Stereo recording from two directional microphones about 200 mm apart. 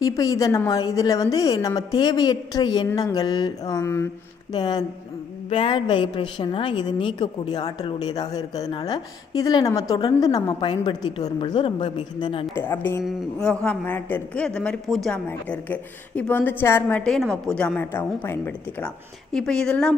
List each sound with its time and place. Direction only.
0.0 s a woman's voice: 15° left (ahead or behind)
12.5 s a woman's voice: 10° left (ahead or behind)